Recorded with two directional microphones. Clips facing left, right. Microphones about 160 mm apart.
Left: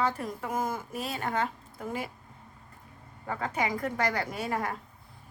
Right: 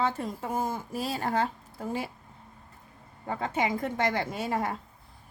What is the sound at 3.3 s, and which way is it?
A woman's voice, 25° right (ahead or behind).